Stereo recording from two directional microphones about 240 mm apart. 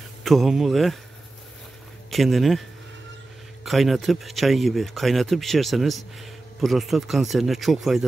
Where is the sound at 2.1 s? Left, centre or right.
Centre.